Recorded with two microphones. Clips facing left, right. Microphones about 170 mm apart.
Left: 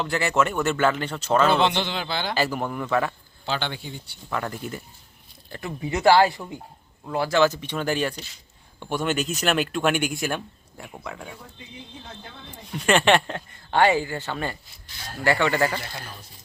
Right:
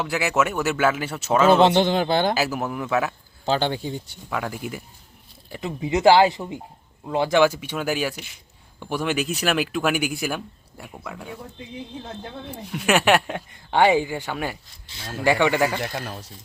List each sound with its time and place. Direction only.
0.0 s speech: 5° right (ahead or behind)
1.5 s speech: 40° right (ahead or behind)
2.3 s speech: 5° right (ahead or behind)
3.4 s speech: 40° right (ahead or behind)
4.3 s speech: 10° right (ahead or behind)
5.5 s speech: 20° right (ahead or behind); by 11.3 s centre (ahead or behind)
12.7 s speech: 5° right (ahead or behind)
14.9 s speech: 25° right (ahead or behind)
15.2 s speech: 15° right (ahead or behind)
15.8 s speech: 80° right